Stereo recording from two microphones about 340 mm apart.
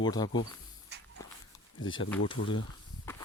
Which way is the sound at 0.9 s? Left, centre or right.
Right.